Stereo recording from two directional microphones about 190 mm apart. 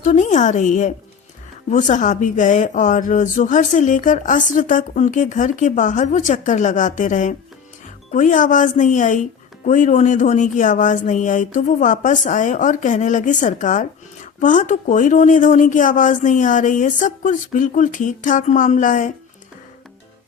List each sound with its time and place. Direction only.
0.0 s speech: 40° left (ahead or behind)